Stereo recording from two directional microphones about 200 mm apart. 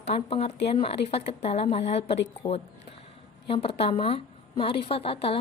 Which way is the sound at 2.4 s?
20° left (ahead or behind).